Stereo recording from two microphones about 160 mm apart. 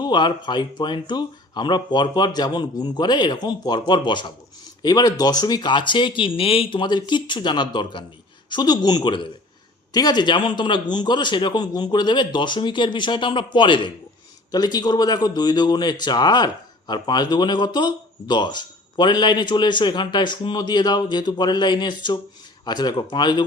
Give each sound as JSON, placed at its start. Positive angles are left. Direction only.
{"t": 0.0, "sound": "speech", "side_deg": 30}